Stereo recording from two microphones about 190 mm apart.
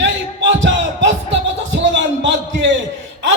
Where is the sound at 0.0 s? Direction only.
70° right (ahead or behind).